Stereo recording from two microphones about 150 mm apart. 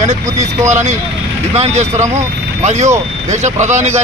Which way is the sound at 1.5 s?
45° right (ahead or behind).